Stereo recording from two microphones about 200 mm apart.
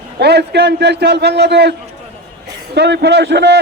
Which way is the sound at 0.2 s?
55° right (ahead or behind).